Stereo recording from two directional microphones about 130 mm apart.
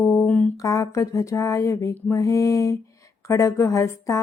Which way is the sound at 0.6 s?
25° left (ahead or behind).